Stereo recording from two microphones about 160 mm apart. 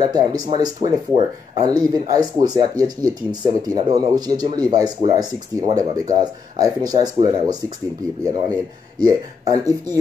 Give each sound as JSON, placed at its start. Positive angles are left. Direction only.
{"t": 0.0, "sound": "speech", "side_deg": -25}